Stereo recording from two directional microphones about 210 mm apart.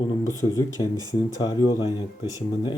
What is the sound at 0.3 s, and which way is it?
Speech, 15° left (ahead or behind).